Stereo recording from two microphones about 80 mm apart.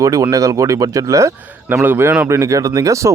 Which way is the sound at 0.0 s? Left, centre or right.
Right.